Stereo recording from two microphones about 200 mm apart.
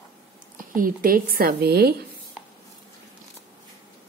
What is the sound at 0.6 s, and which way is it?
Speech, 45° right (ahead or behind).